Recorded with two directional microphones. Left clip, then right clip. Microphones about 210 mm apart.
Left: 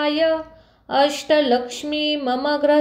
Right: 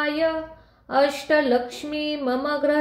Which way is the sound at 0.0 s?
25° left (ahead or behind).